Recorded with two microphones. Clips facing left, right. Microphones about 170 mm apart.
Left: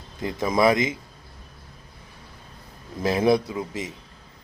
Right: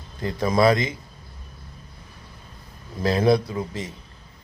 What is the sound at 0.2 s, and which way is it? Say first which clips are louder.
Speech: right 1 dB; 15° left (ahead or behind).